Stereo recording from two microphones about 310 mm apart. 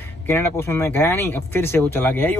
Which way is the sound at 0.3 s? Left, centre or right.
Centre.